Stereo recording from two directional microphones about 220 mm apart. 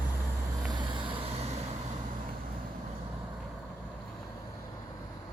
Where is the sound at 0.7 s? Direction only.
20° right (ahead or behind).